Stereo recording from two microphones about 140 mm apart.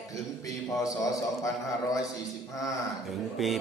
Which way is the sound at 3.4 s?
Centre (ahead or behind).